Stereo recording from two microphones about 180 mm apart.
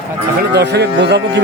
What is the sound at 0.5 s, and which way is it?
Speech, 70° right (ahead or behind).